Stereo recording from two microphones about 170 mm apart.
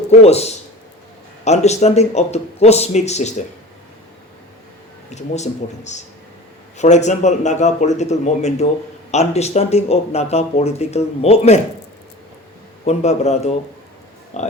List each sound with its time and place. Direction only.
0.1 s speech: 40° left (ahead or behind)
5.1 s a man's voice: 40° left (ahead or behind)
12.8 s a man's voice: 40° left (ahead or behind)